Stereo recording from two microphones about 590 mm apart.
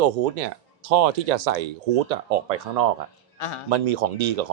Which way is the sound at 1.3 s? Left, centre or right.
Right.